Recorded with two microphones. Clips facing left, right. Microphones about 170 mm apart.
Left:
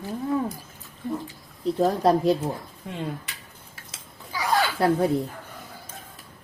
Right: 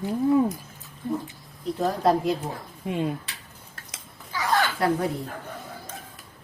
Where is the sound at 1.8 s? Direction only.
35° left (ahead or behind).